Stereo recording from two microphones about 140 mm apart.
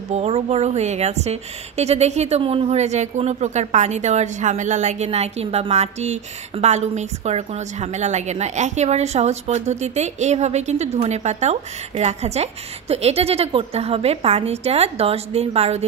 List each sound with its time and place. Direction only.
0.1 s a woman's voice: 50° right (ahead or behind)